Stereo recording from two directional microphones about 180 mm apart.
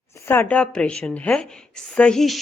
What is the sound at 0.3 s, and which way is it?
A woman's voice, 10° left (ahead or behind).